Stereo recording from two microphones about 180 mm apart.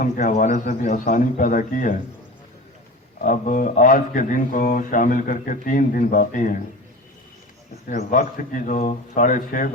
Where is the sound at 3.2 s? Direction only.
45° left (ahead or behind).